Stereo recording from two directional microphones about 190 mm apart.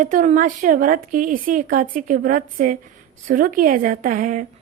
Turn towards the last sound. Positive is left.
turn(degrees=-45)  # may be behind; listen again after turning